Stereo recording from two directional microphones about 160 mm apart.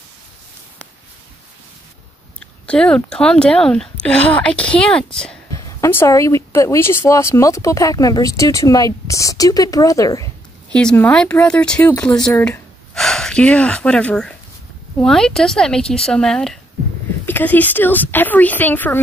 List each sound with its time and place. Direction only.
2.6 s speech: 5° left (ahead or behind)
5.5 s speech: 15° left (ahead or behind)
10.7 s a woman's voice: 5° left (ahead or behind)